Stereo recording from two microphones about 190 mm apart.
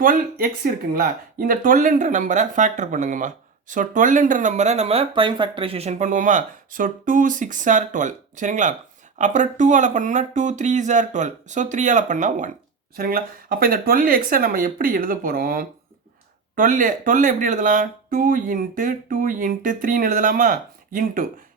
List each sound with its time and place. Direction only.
0.0 s speech: 50° right (ahead or behind)